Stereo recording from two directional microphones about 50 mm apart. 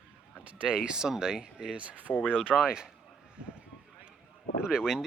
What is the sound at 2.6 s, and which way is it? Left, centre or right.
Speech, centre.